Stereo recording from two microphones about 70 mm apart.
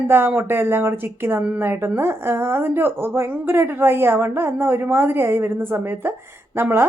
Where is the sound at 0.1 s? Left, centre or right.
Right.